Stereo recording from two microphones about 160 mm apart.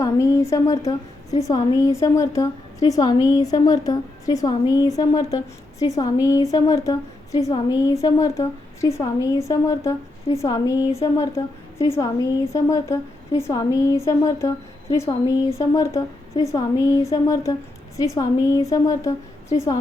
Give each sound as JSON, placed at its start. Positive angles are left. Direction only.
{"t": 0.0, "sound": "a woman's voice", "side_deg": 20}